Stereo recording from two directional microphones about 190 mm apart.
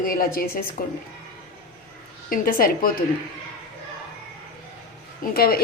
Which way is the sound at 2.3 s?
50° left (ahead or behind).